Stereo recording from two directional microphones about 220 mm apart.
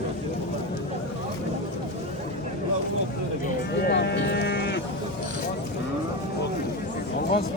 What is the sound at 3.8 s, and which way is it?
Livestock, 45° left (ahead or behind).